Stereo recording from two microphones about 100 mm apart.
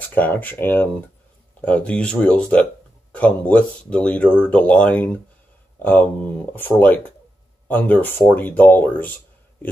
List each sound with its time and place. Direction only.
0.1 s speech: 15° left (ahead or behind)